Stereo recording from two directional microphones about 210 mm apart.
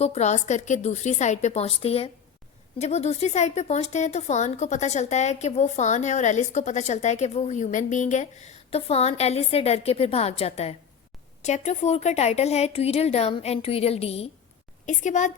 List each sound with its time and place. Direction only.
0.0 s a woman's voice: 30° left (ahead or behind)